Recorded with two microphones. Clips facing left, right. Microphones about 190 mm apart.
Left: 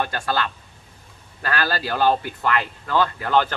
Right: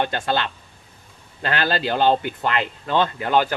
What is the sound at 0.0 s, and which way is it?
Speech, 20° right (ahead or behind).